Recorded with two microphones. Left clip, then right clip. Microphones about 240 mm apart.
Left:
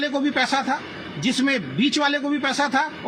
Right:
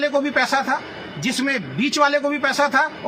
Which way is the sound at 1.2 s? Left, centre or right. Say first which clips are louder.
Even; right.